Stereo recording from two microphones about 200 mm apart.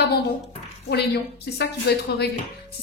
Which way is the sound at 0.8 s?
55° left (ahead or behind).